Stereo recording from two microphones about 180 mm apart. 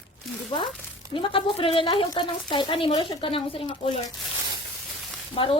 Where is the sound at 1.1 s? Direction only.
30° left (ahead or behind).